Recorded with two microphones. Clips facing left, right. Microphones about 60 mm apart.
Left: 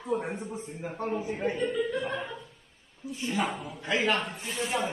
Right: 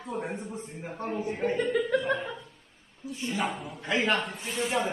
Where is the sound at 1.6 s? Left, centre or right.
Right.